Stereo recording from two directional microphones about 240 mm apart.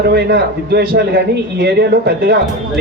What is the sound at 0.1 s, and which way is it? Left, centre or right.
A man's voice, right.